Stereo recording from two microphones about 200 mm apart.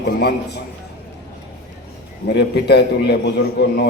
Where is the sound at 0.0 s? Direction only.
55° left (ahead or behind).